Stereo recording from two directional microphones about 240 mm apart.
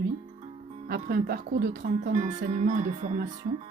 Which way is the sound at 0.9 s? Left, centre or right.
Right.